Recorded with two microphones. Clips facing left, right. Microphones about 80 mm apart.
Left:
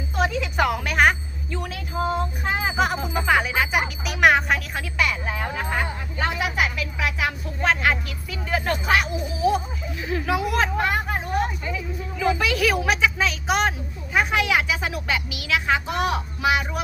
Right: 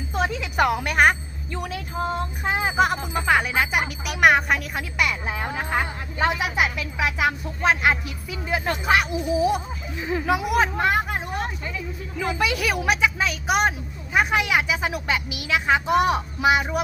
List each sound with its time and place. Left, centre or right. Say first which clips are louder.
0.2 s a sound: even; centre
2.4 s speech: right 4 dB; centre
12.2 s speech: left 2 dB; centre